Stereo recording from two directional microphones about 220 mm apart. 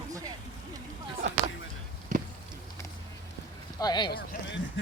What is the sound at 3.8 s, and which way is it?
Speech, 20° left (ahead or behind).